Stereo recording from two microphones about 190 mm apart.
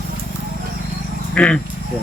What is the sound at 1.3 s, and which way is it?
Speech, 5° left (ahead or behind).